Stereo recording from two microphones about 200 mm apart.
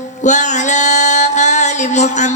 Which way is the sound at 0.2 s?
35° left (ahead or behind).